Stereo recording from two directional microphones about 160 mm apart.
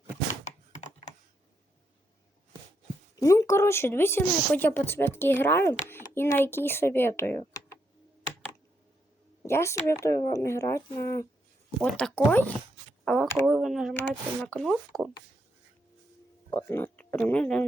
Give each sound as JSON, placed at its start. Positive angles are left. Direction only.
{"t": 0.4, "sound": "computer keyboard", "side_deg": 45}
{"t": 3.2, "sound": "speech", "side_deg": 20}
{"t": 9.5, "sound": "speech", "side_deg": 15}
{"t": 11.8, "sound": "speech", "side_deg": 5}
{"t": 13.3, "sound": "speech", "side_deg": -5}
{"t": 16.5, "sound": "speech", "side_deg": 15}